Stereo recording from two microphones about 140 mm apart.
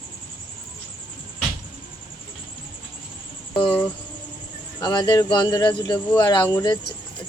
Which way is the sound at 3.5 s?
35° left (ahead or behind).